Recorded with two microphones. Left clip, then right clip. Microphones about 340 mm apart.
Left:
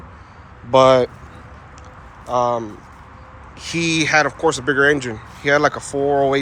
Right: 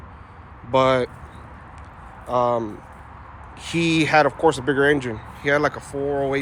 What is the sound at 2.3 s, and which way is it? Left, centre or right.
Speech, centre.